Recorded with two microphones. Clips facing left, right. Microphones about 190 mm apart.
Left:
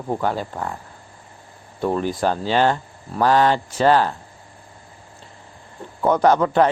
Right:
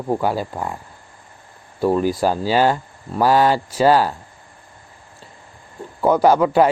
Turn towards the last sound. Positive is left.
turn(degrees=-10)  # may be behind; listen again after turning